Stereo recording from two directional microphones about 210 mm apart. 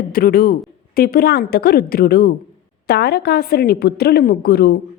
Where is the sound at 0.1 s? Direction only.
45° left (ahead or behind).